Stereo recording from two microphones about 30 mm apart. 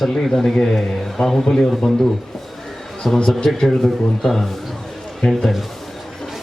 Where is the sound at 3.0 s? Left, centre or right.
Centre.